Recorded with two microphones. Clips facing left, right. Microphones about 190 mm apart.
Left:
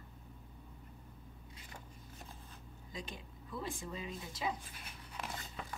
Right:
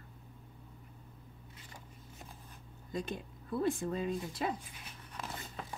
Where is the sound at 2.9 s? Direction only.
60° right (ahead or behind).